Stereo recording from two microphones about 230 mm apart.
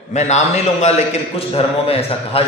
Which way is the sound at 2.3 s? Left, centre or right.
Left.